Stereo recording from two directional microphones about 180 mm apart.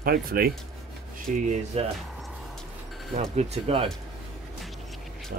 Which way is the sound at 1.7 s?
35° right (ahead or behind).